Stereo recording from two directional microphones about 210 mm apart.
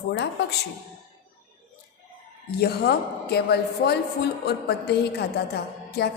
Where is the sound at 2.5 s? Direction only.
50° left (ahead or behind).